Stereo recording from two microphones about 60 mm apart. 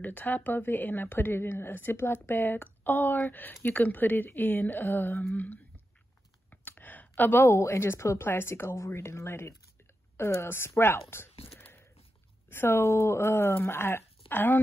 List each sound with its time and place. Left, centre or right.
0.0 s speech: left
5.3 s a woman's voice: left